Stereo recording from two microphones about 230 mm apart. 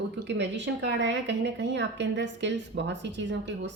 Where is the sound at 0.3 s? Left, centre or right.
Right.